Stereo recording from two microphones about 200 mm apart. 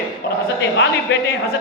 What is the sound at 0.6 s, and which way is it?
Speech, 60° left (ahead or behind).